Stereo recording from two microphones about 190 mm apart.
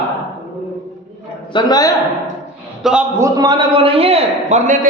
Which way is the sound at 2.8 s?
Centre (ahead or behind).